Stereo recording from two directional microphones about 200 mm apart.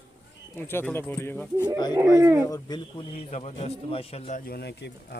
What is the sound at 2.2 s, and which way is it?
Speech, 15° right (ahead or behind).